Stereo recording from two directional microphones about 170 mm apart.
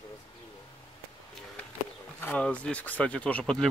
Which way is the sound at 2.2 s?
10° left (ahead or behind).